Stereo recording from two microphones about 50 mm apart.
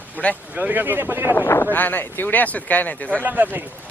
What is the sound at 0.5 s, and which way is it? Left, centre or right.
Speech, right.